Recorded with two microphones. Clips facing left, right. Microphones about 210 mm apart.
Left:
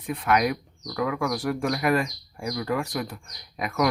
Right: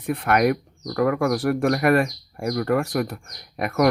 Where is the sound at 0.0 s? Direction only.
60° right (ahead or behind).